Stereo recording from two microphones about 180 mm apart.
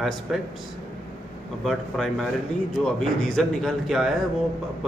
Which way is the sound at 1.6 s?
Centre (ahead or behind).